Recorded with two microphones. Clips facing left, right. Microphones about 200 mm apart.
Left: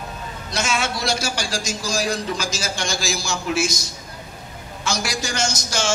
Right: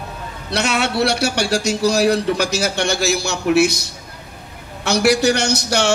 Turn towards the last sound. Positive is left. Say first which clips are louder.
# right 6 dB
turn(degrees=-65)  # may be behind; listen again after turning